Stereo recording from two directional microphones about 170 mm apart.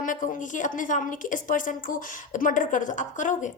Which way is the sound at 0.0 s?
50° left (ahead or behind).